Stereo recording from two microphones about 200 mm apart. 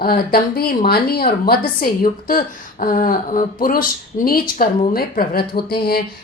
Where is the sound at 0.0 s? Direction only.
50° left (ahead or behind).